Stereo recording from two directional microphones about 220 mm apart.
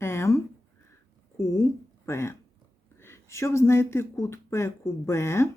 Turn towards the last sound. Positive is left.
turn(degrees=15)  # may be behind; listen again after turning